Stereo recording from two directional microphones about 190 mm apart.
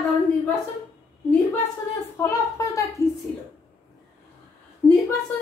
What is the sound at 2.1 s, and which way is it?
Speech, 15° left (ahead or behind).